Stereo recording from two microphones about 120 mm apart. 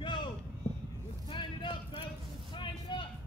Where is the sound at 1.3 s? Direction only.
45° left (ahead or behind).